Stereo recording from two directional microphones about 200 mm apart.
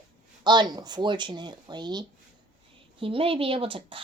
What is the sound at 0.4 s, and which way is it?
Speech, 20° right (ahead or behind).